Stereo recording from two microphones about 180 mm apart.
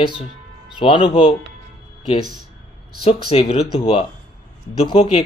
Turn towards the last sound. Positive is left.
turn(degrees=35)  # may be behind; listen again after turning